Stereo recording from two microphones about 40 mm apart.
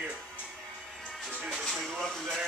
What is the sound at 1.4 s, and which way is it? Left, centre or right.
Music, centre.